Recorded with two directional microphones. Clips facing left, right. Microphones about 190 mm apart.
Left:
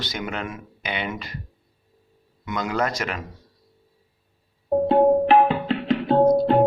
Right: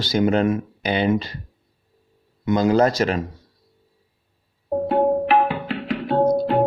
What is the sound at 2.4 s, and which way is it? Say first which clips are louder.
Speech: right 8 dB; 30° right (ahead or behind).